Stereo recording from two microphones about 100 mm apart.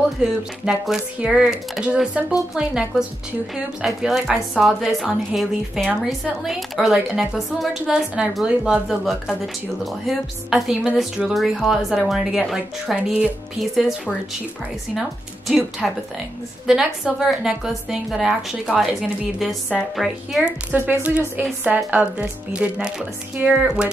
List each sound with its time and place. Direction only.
0.2 s a woman's voice: 5° right (ahead or behind)
15.8 s a woman's voice: centre (ahead or behind)
20.7 s speech: 20° right (ahead or behind)